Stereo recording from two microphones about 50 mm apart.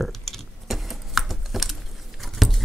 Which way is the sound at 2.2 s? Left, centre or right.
Centre.